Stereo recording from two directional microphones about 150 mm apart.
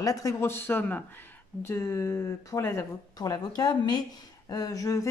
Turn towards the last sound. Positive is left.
turn(degrees=25)  # may be behind; listen again after turning